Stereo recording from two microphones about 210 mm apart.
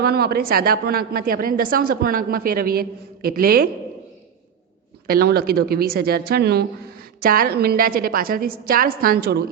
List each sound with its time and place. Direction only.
0.0 s a woman's voice: 45° right (ahead or behind)
5.0 s a woman's voice: 45° right (ahead or behind)